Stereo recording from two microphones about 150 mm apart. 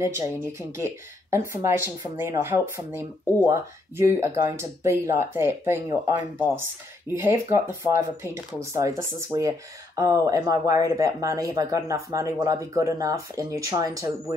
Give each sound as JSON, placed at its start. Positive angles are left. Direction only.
{"t": 0.0, "sound": "speech", "side_deg": -20}
{"t": 7.1, "sound": "speech", "side_deg": -15}